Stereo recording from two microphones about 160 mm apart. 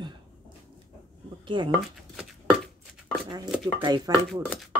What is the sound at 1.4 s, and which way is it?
Speech, 30° right (ahead or behind).